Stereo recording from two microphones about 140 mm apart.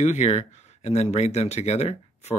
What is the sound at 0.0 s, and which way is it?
Speech, 55° left (ahead or behind).